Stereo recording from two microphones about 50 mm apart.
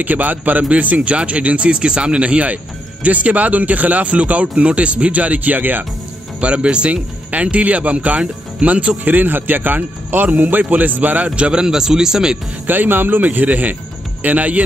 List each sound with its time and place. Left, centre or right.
0.0 s speech: right
6.4 s speech: right
11.2 s a man's voice: centre
12.6 s speech: right